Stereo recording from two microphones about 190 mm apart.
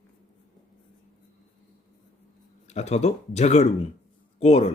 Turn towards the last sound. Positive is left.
turn(degrees=30)  # may be behind; listen again after turning